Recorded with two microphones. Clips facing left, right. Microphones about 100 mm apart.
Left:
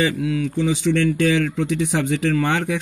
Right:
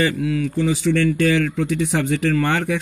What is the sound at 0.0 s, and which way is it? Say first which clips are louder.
Speech: right 1 dB; 20° left (ahead or behind).